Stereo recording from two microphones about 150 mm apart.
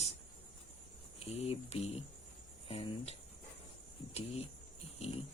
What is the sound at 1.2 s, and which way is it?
Speech, 40° left (ahead or behind).